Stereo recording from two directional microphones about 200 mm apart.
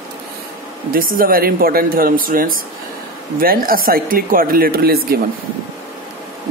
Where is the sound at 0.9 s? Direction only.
45° right (ahead or behind).